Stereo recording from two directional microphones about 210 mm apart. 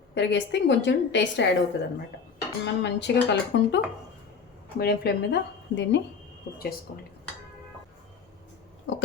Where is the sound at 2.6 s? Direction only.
55° left (ahead or behind).